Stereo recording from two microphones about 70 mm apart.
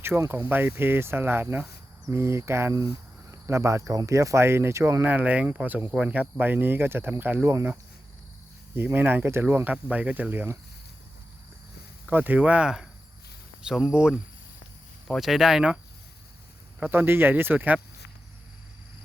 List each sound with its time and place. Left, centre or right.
0.3 s speech: right
5.0 s speech: right
8.7 s speech: right
12.1 s speech: right
13.8 s speech: centre
15.2 s speech: centre
16.9 s speech: right